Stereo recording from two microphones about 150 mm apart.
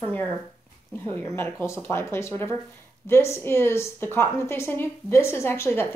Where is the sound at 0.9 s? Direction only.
15° left (ahead or behind).